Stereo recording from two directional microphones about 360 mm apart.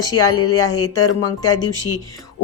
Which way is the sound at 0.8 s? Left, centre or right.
Left.